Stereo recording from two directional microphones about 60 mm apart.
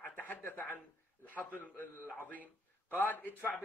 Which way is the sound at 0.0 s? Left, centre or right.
Left.